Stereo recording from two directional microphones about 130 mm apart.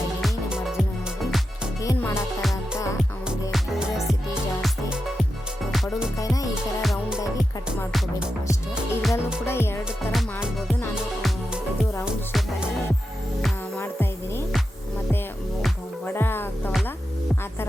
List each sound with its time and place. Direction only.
0.2 s music: 5° right (ahead or behind)
1.8 s music: 25° left (ahead or behind)
3.5 s music: centre (ahead or behind)
5.7 s music: centre (ahead or behind)
6.1 s music: 25° left (ahead or behind)
6.5 s music: 5° right (ahead or behind)
8.7 s music: centre (ahead or behind)
9.5 s music: 20° left (ahead or behind)
10.1 s music: centre (ahead or behind)
12.0 s music: 5° right (ahead or behind)
13.7 s music: 20° left (ahead or behind)
16.0 s music: 15° left (ahead or behind)